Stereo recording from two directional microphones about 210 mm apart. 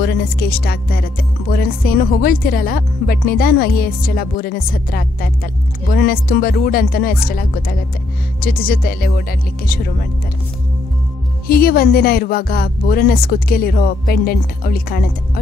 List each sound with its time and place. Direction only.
0.0 s speech: 50° left (ahead or behind)
11.4 s speech: 45° left (ahead or behind)